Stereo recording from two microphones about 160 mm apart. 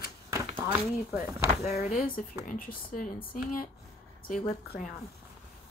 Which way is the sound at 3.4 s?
60° left (ahead or behind).